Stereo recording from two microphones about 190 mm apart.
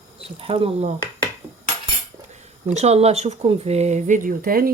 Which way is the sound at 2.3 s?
35° right (ahead or behind).